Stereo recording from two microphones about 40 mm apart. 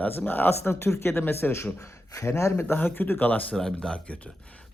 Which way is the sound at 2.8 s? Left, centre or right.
Left.